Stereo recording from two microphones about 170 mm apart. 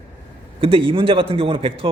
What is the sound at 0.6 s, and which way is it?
A man's voice, 30° right (ahead or behind).